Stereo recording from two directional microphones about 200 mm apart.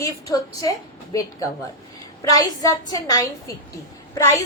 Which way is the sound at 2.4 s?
15° left (ahead or behind).